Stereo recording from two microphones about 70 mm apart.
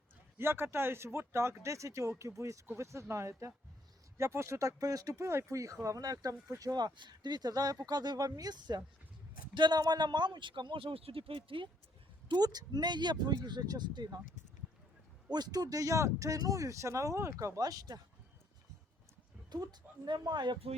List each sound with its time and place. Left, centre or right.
0.3 s speech: right
5.1 s speech: right
6.6 s speech: right
12.3 s speech: right
15.3 s speech: right
17.6 s speech: right
19.7 s speech: right